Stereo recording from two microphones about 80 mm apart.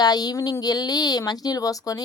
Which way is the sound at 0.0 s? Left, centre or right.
Left.